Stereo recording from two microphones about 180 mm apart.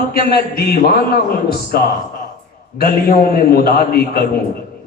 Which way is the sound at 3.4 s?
60° left (ahead or behind).